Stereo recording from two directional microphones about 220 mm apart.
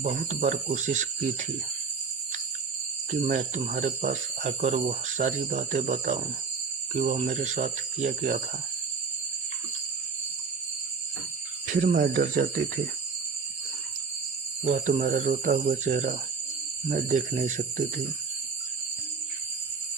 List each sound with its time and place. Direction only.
0.0 s speech: 35° right (ahead or behind)
3.1 s speech: 35° right (ahead or behind)
11.6 s speech: 35° right (ahead or behind)
14.6 s speech: 30° right (ahead or behind)